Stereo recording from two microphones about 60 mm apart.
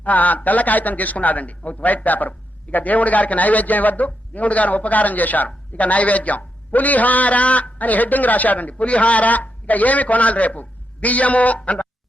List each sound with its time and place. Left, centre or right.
0.0 s a man's voice: left